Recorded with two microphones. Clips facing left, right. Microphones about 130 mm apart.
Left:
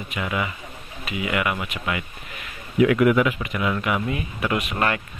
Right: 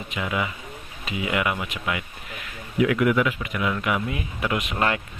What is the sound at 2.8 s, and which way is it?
Speech, 45° left (ahead or behind).